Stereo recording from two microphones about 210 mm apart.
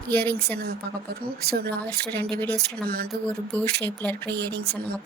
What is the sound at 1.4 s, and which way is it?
Speech, 50° right (ahead or behind).